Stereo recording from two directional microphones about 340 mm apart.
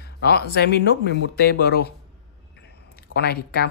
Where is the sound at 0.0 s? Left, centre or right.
Left.